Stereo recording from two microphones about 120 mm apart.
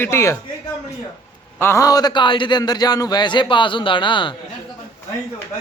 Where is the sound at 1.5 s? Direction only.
25° left (ahead or behind); by 4.4 s 40° left (ahead or behind).